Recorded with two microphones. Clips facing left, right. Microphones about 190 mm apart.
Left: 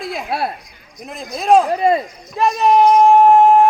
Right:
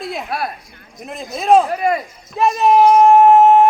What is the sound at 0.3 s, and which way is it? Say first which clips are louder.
Speech: left 4 dB; 30° left (ahead or behind).